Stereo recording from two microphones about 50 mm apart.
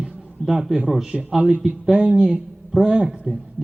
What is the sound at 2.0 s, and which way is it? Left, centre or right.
Speech, centre.